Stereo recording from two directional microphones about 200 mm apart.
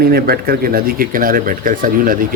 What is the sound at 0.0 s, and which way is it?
Speech, 50° right (ahead or behind).